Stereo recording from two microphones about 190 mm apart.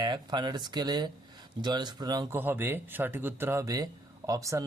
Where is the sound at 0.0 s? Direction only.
20° right (ahead or behind).